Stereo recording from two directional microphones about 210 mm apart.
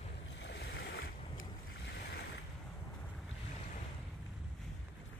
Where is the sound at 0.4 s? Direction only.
55° left (ahead or behind).